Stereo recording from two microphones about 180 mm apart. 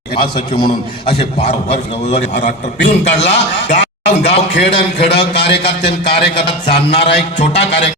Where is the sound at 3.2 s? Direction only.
70° left (ahead or behind).